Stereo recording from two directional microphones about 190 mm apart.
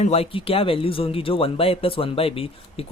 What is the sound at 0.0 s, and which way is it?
Speech, 30° left (ahead or behind).